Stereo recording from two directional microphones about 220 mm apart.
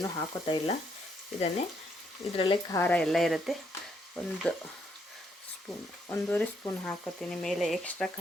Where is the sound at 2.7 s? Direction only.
10° left (ahead or behind).